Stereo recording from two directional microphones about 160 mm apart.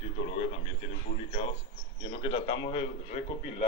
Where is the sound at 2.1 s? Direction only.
30° left (ahead or behind).